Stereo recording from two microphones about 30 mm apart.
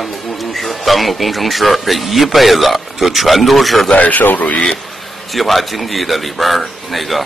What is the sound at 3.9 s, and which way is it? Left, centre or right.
Speech, left.